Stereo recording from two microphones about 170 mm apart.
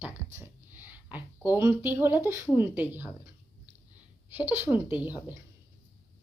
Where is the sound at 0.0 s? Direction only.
10° right (ahead or behind).